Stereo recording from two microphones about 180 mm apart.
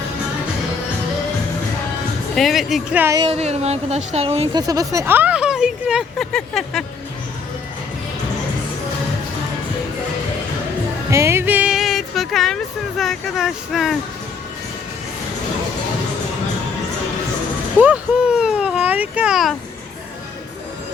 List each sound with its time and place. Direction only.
2.3 s speech: centre (ahead or behind)
3.0 s speech: 20° right (ahead or behind)
3.2 s speech: 35° right (ahead or behind)
4.5 s speech: 20° right (ahead or behind); by 6.8 s centre (ahead or behind)
11.1 s music: 15° right (ahead or behind); by 12.5 s centre (ahead or behind)
13.0 s speech: centre (ahead or behind)
17.7 s a sound: 5° right (ahead or behind)